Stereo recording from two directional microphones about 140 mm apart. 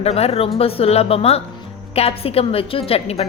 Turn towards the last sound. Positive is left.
turn(degrees=45)  # may be behind; listen again after turning